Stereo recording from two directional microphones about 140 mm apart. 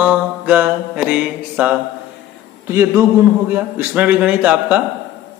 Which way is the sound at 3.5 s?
15° right (ahead or behind).